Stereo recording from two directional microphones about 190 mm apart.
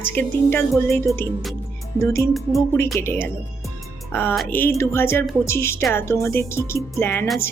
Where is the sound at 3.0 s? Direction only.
10° left (ahead or behind).